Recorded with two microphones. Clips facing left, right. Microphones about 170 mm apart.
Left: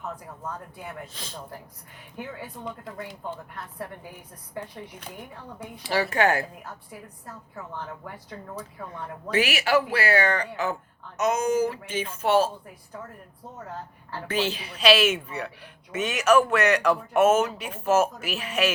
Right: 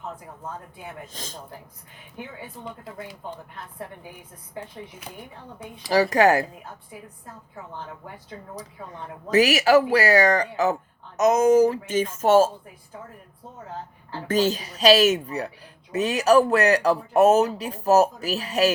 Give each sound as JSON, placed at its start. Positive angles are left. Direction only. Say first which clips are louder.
{"t": 1.1, "sound": "a man's voice", "louder": "right 2 dB", "side_deg": -45}
{"t": 5.8, "sound": "a woman's voice", "louder": "right 5 dB", "side_deg": -40}
{"t": 9.3, "sound": "a woman's voice", "louder": "right 6 dB", "side_deg": -40}
{"t": 14.3, "sound": "a woman's voice", "louder": "right 6 dB", "side_deg": -40}